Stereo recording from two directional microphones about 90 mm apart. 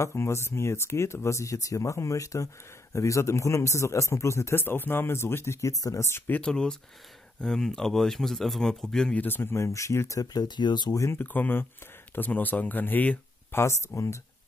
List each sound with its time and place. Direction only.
0.0 s speech: 30° left (ahead or behind)
6.4 s speech: 10° left (ahead or behind)
9.2 s speech: 25° left (ahead or behind); by 11.0 s 55° left (ahead or behind)
11.0 s speech: 25° left (ahead or behind)
13.6 s speech: 35° left (ahead or behind)